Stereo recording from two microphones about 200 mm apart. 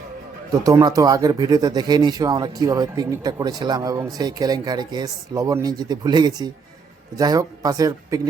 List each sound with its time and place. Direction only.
0.6 s speech: 15° right (ahead or behind)